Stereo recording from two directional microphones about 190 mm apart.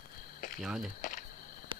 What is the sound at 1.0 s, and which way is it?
Speech, 45° left (ahead or behind).